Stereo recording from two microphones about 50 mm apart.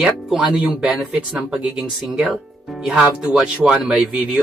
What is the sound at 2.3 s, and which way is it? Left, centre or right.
Speech, centre.